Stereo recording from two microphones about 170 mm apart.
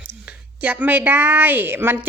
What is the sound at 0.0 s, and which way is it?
A woman's voice, 10° right (ahead or behind).